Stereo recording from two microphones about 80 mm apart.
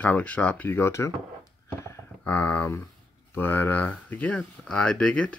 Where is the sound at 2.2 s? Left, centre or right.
Centre.